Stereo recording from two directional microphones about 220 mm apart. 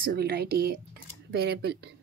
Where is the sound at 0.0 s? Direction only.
45° right (ahead or behind).